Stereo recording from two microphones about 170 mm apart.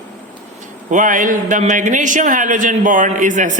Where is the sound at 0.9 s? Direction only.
50° right (ahead or behind).